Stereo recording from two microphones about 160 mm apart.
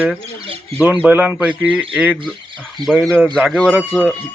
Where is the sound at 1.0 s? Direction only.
10° right (ahead or behind).